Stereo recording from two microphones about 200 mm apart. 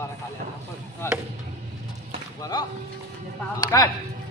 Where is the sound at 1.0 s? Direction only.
15° left (ahead or behind).